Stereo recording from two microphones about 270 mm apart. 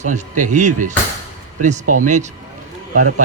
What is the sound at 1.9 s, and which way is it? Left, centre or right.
Speech, right.